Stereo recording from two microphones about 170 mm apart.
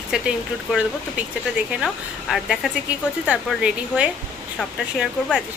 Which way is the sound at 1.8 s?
Centre (ahead or behind).